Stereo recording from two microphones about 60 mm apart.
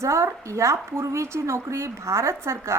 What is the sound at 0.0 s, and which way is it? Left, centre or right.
A woman's voice, right.